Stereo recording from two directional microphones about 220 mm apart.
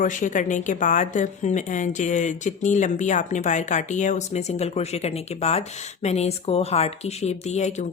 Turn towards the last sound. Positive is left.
turn(degrees=30)  # may be behind; listen again after turning